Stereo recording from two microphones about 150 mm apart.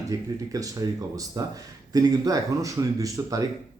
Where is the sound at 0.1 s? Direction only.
20° right (ahead or behind).